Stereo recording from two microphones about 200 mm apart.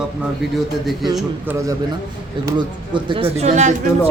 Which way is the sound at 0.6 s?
Centre (ahead or behind).